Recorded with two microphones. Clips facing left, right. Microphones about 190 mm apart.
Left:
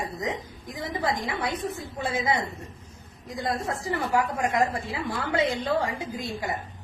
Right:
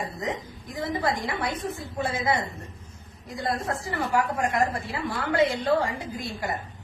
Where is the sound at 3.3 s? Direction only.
15° left (ahead or behind).